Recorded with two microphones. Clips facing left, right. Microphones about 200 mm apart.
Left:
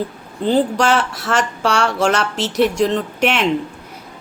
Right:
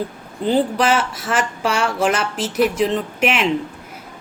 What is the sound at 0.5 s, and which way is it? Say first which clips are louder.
Speech: left 1 dB; 5° right (ahead or behind).